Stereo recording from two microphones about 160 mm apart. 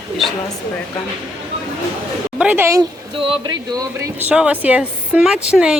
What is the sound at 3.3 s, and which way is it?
Speech, 25° right (ahead or behind).